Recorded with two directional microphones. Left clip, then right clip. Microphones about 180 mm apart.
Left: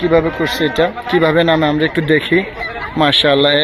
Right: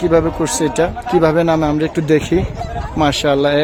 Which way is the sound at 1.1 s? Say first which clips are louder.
Left 1 dB; 10° right (ahead or behind).